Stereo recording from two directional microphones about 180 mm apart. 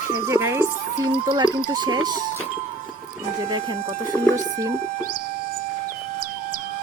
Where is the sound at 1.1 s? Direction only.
30° right (ahead or behind).